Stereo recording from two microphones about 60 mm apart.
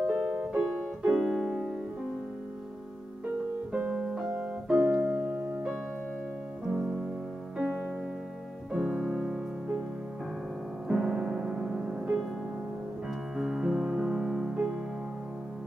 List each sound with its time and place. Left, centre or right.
0.0 s music: centre
0.7 s piano: centre
1.1 s music: centre
3.7 s piano: right
5.5 s music: right
7.6 s music: right
8.7 s music: centre
10.9 s music: centre
13.4 s music: centre